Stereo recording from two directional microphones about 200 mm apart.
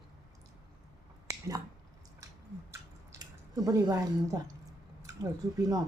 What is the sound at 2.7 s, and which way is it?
Drip, 15° right (ahead or behind).